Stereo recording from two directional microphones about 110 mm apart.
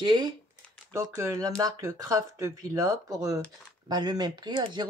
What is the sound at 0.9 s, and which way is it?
Speech, 25° right (ahead or behind).